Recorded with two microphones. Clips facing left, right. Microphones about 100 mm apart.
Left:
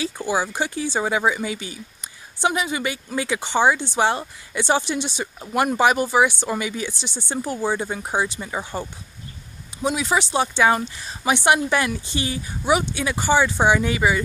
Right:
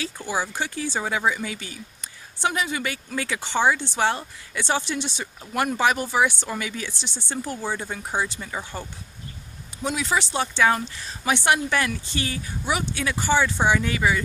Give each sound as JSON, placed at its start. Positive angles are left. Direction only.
{"t": 0.0, "sound": "speech", "side_deg": 10}